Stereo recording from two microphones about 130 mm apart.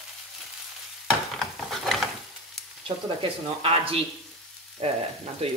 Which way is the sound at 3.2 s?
45° right (ahead or behind).